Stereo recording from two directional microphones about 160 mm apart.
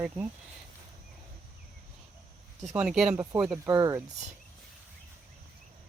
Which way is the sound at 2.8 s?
5° right (ahead or behind).